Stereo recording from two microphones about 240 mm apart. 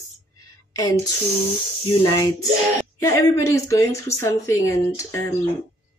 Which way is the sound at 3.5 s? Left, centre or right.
Centre.